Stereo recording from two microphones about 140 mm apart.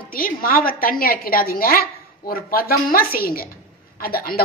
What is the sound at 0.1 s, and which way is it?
A woman's voice, 90° left.